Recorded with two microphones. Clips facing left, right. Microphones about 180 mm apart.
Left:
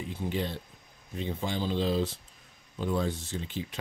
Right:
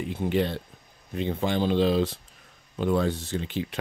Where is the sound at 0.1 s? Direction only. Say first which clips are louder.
Right 7 dB; 65° right (ahead or behind).